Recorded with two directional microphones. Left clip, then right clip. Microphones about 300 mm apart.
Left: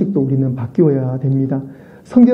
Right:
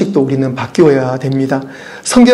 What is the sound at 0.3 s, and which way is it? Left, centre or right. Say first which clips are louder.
A man's voice: right 5 dB; centre.